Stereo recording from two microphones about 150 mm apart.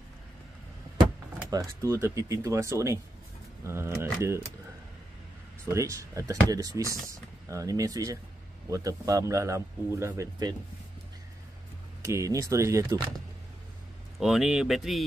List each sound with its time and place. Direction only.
1.5 s a man's voice: 20° right (ahead or behind)
5.7 s a man's voice: 20° right (ahead or behind)
12.0 s a man's voice: 20° right (ahead or behind)
14.2 s speech: 5° right (ahead or behind)